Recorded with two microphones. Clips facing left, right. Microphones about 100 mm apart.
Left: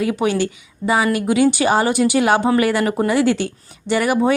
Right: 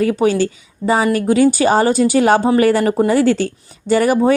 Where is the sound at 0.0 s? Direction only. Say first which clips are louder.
Right 4 dB; 40° right (ahead or behind).